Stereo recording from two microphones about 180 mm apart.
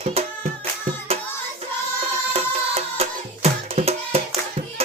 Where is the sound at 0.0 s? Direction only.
35° right (ahead or behind).